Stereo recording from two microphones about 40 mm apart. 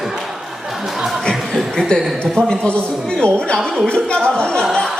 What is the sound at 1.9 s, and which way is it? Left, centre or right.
A man's voice, left.